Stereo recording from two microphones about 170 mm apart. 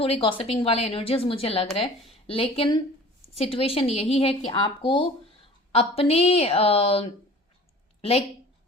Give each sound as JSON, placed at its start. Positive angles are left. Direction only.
{"t": 0.0, "sound": "speech", "side_deg": 30}